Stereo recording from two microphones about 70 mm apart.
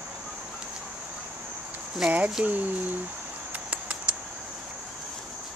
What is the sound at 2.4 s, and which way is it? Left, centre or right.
Speech, centre.